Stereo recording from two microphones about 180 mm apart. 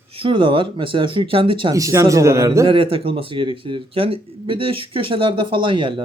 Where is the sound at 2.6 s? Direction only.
30° right (ahead or behind).